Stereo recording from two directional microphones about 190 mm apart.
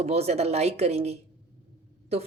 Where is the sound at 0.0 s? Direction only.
35° right (ahead or behind).